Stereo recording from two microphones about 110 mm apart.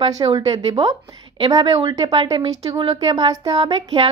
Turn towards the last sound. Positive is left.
turn(degrees=-50)  # may be behind; listen again after turning